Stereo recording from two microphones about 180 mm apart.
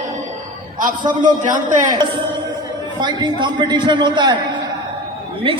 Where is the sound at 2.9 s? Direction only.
25° right (ahead or behind).